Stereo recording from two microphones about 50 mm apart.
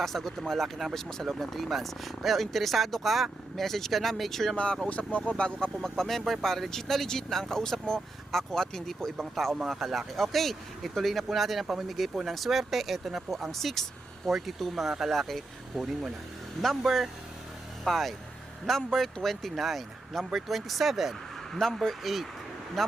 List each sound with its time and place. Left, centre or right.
0.0 s speech: centre
4.5 s speech: left; by 21.2 s centre
21.5 s speech: centre